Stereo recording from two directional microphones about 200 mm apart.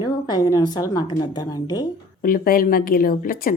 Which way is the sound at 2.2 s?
45° left (ahead or behind).